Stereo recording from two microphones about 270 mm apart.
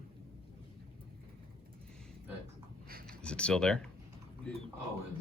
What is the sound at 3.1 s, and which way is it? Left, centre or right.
Speech, centre.